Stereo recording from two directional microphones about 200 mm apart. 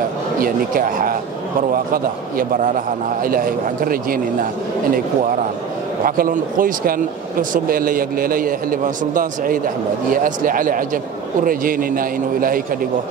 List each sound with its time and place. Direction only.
0.4 s a man's voice: 45° right (ahead or behind)
2.3 s a man's voice: 45° right (ahead or behind)
6.0 s a man's voice: 45° right (ahead or behind)